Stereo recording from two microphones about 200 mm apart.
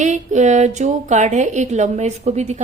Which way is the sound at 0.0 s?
35° right (ahead or behind).